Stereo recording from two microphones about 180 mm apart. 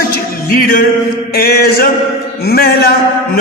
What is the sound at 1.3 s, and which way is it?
A man's voice, 60° left (ahead or behind).